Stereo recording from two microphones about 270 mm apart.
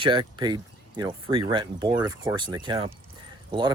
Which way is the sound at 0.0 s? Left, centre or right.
Centre.